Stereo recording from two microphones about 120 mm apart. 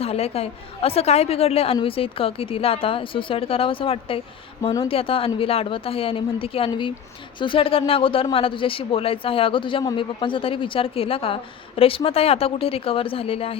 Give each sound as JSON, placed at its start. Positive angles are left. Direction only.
{"t": 0.0, "sound": "a woman's voice", "side_deg": 55}